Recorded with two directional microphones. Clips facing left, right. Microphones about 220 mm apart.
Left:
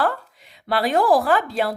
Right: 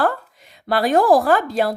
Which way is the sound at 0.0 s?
45° right (ahead or behind).